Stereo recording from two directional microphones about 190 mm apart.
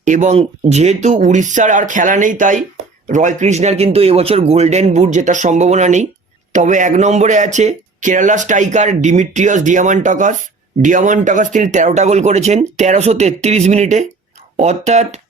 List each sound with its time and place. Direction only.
0.0 s speech: 40° right (ahead or behind)